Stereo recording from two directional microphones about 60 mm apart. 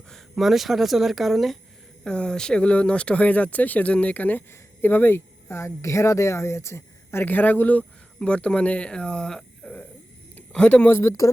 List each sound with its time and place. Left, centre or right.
0.3 s speech: centre
2.0 s speech: centre
10.8 s speech: left